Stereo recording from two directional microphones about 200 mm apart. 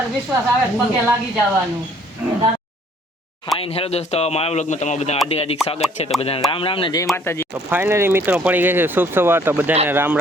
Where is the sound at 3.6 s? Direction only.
30° left (ahead or behind); by 7.5 s 10° left (ahead or behind).